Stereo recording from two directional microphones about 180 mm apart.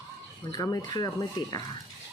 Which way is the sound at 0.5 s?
20° left (ahead or behind).